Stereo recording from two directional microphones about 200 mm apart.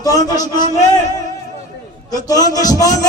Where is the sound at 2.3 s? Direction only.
20° left (ahead or behind).